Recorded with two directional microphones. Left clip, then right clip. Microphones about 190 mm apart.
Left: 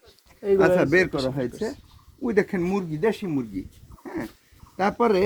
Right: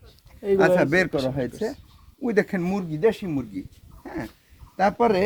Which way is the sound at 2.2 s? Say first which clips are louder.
Even; 25° right (ahead or behind).